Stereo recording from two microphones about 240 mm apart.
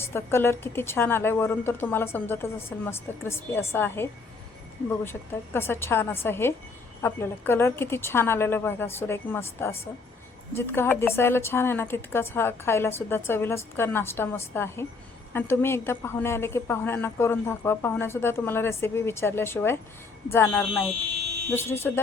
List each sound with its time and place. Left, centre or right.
0.0 s a woman's voice: centre